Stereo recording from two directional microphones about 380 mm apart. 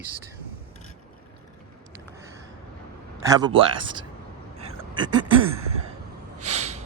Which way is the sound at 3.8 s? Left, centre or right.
Centre.